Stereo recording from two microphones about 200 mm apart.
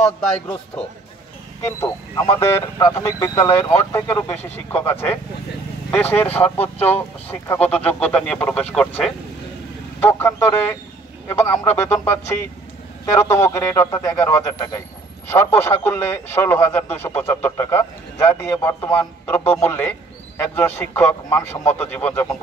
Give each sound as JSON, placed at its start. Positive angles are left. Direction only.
{"t": 1.8, "sound": "a man's voice", "side_deg": 20}